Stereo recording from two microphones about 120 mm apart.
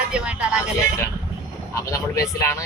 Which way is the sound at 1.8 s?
25° left (ahead or behind).